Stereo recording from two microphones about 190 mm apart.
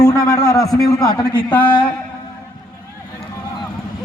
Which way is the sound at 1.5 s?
25° left (ahead or behind).